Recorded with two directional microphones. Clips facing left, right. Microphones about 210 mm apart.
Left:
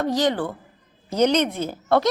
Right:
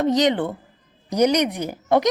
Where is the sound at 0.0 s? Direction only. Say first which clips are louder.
Right 3 dB; 20° right (ahead or behind).